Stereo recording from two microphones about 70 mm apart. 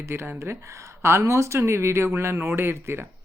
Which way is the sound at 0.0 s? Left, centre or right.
Right.